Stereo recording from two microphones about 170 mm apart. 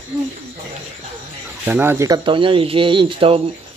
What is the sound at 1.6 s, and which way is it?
Speech, 10° right (ahead or behind).